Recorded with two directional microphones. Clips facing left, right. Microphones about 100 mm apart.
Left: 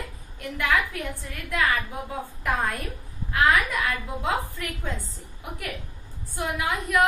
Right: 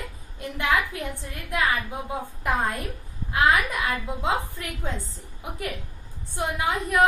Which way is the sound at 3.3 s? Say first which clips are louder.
Even; 20° right (ahead or behind).